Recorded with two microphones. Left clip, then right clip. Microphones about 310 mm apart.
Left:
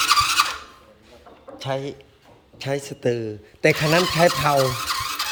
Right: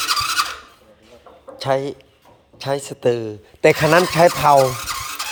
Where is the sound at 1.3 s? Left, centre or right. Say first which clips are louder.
Right 3 dB; centre.